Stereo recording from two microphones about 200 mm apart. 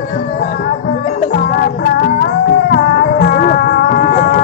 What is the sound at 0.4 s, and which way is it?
Music, 50° left (ahead or behind).